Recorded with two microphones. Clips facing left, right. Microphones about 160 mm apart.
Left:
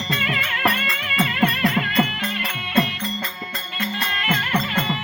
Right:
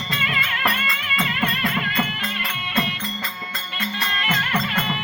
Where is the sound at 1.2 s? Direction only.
45° left (ahead or behind).